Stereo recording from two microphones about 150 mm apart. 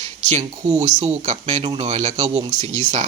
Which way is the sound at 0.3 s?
50° right (ahead or behind).